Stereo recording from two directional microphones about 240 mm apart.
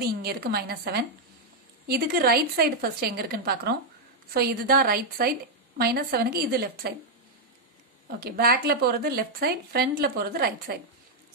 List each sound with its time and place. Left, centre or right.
0.0 s speech: right
8.2 s speech: right